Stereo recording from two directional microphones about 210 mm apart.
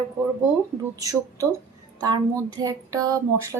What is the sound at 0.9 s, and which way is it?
A woman's voice, 15° right (ahead or behind).